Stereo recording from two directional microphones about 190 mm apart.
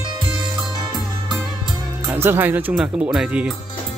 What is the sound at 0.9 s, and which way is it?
Music, 20° right (ahead or behind).